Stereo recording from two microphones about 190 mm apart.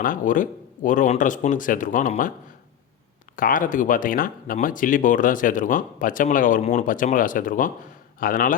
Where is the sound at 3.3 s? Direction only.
45° left (ahead or behind).